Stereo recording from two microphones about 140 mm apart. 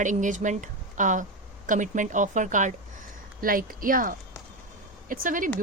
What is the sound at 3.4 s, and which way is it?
Speech, 90° right.